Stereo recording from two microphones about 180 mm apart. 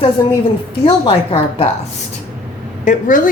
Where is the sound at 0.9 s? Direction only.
30° left (ahead or behind).